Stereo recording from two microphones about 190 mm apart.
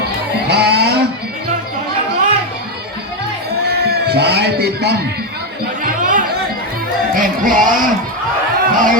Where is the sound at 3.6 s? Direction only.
55° right (ahead or behind).